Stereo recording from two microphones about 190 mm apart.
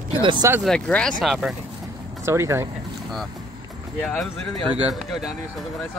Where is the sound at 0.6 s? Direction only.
5° left (ahead or behind).